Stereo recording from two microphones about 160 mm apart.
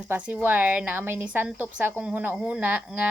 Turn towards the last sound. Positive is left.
turn(degrees=-10)  # may be behind; listen again after turning